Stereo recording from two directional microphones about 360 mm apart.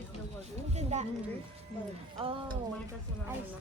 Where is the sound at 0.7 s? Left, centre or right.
Centre.